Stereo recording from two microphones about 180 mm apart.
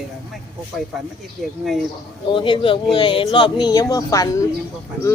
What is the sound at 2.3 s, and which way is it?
Speech, 30° left (ahead or behind).